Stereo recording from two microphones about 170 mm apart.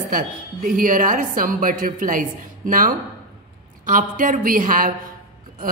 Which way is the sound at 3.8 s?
50° right (ahead or behind).